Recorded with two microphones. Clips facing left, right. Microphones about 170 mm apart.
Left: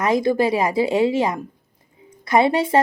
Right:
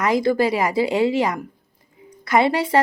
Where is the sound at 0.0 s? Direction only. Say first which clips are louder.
Even; 20° left (ahead or behind).